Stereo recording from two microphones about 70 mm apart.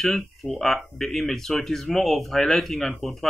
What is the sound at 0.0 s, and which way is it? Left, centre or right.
Speech, centre.